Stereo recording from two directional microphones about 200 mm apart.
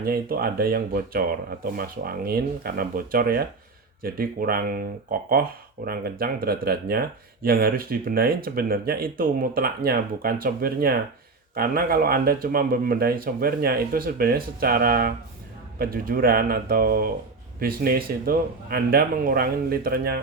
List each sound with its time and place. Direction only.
0.0 s speech: 50° right (ahead or behind)